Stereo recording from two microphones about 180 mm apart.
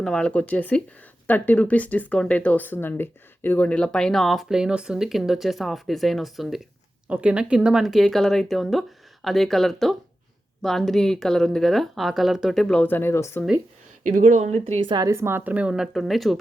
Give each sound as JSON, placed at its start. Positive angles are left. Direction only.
{"t": 0.0, "sound": "speech", "side_deg": 5}
{"t": 14.0, "sound": "speech", "side_deg": -45}
{"t": 14.8, "sound": "speech", "side_deg": -20}